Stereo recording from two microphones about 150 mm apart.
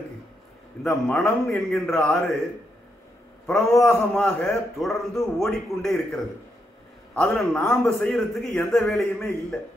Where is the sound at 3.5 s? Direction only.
Centre (ahead or behind).